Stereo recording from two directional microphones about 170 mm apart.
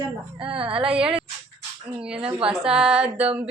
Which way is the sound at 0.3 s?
30° right (ahead or behind).